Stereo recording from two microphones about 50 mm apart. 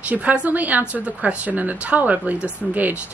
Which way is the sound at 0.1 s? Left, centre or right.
Right.